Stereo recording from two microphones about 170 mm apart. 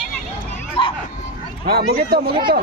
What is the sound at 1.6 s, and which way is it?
Speech, 65° right (ahead or behind).